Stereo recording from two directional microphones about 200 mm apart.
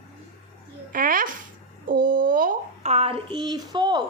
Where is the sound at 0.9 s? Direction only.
45° right (ahead or behind); by 4.0 s 20° right (ahead or behind).